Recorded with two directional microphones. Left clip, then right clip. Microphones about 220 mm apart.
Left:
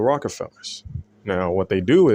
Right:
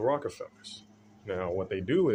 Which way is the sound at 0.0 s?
40° left (ahead or behind).